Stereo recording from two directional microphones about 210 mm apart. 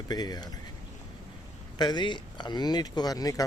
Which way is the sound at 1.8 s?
20° left (ahead or behind).